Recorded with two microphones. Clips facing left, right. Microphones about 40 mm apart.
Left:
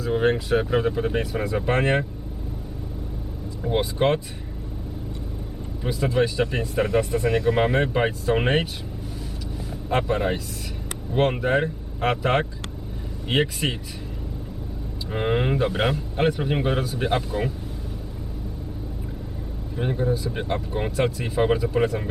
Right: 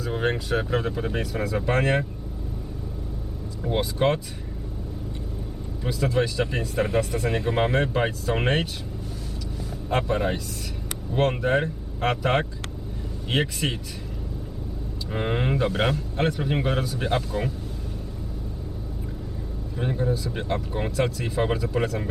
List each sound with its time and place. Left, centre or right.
0.0 s a man's voice: centre
3.8 s a man's voice: centre
5.8 s a man's voice: centre
7.3 s speech: centre
7.5 s a man's voice: centre
10.0 s a man's voice: centre
15.1 s a man's voice: centre
19.7 s a man's voice: centre